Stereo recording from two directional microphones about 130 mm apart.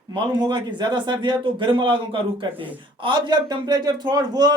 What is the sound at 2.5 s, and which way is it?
Speech, 15° right (ahead or behind).